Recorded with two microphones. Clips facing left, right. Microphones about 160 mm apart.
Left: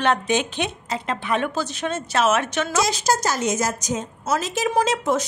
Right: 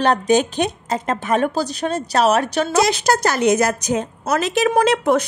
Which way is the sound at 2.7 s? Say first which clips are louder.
Right 5 dB; 65° right (ahead or behind).